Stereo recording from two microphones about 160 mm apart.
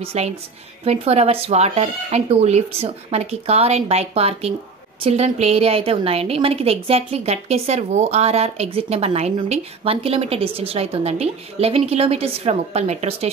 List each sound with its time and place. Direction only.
0.0 s a woman's voice: 40° right (ahead or behind)